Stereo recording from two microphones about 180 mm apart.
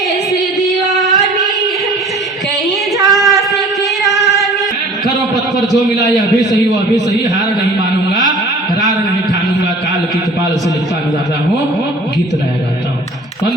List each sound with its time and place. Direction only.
0.6 s female singing: centre (ahead or behind)
3.1 s a sound: centre (ahead or behind)
4.0 s singing: centre (ahead or behind)
6.7 s a man's voice: 20° right (ahead or behind)